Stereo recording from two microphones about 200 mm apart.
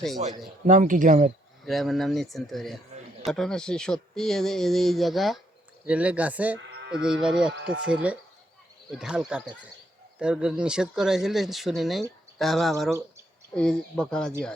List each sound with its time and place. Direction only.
0.2 s a man's voice: 35° right (ahead or behind)
1.6 s speech: centre (ahead or behind)